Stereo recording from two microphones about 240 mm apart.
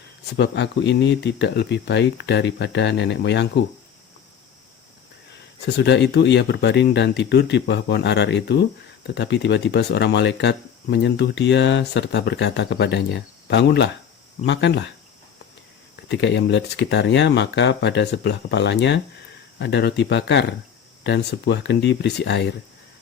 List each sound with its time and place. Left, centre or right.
0.3 s speech: left
5.6 s speech: left
16.0 s speech: left